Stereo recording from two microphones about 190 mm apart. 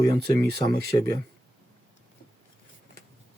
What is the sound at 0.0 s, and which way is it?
Speech, 55° right (ahead or behind).